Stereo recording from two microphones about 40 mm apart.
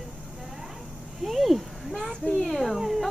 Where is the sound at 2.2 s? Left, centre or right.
Centre.